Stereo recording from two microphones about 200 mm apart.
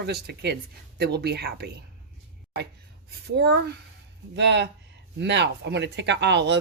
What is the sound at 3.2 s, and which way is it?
A woman's voice, 55° right (ahead or behind).